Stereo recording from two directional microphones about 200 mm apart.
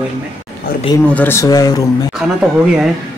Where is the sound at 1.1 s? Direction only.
10° left (ahead or behind).